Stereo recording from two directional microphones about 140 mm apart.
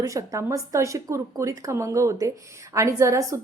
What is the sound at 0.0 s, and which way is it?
A woman's voice, 25° right (ahead or behind).